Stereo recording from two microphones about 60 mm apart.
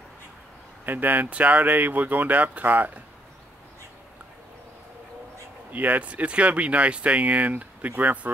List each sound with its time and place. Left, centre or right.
0.8 s speech: right
5.7 s speech: right